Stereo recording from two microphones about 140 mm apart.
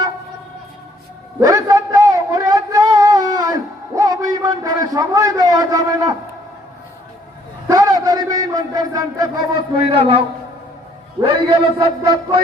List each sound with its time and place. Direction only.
1.4 s a sound: 25° right (ahead or behind)
7.7 s a man's voice: 25° right (ahead or behind)
11.2 s a man's voice: 35° right (ahead or behind)